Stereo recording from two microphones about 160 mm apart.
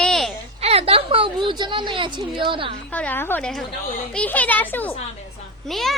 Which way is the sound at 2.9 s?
10° left (ahead or behind).